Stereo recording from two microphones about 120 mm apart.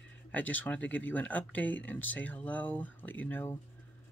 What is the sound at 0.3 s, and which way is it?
Speech, 15° left (ahead or behind).